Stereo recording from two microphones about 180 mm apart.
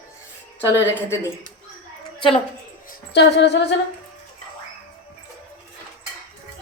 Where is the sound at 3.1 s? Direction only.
70° left (ahead or behind).